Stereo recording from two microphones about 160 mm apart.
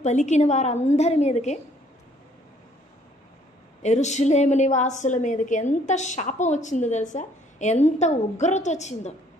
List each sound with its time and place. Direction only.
0.0 s a woman's voice: 45° left (ahead or behind)
3.8 s a woman's voice: 45° left (ahead or behind)